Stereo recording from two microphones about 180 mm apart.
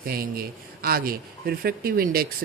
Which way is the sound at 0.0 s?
55° right (ahead or behind).